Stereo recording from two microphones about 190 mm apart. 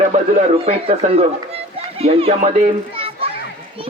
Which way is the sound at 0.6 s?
30° right (ahead or behind).